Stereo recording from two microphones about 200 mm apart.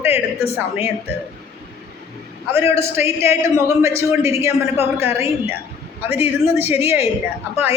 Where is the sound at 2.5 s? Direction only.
15° right (ahead or behind).